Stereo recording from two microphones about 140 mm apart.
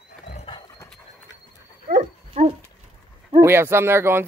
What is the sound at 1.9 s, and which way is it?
Dog, 60° right (ahead or behind).